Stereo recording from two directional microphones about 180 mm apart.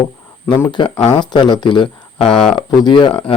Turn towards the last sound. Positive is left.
turn(degrees=30)  # may be behind; listen again after turning